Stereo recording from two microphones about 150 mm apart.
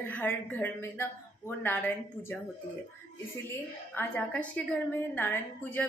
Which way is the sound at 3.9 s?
10° left (ahead or behind).